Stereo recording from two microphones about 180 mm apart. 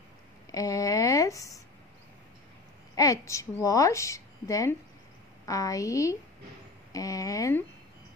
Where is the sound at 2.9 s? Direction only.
20° left (ahead or behind).